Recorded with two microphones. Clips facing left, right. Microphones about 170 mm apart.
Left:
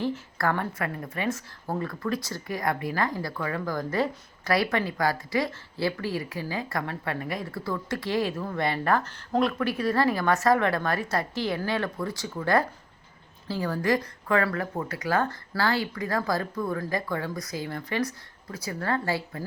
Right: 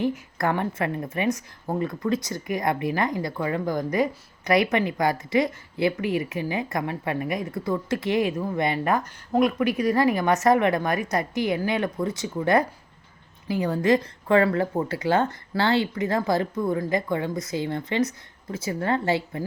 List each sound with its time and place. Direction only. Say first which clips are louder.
0.0 s a woman's voice: right 3 dB; 20° right (ahead or behind)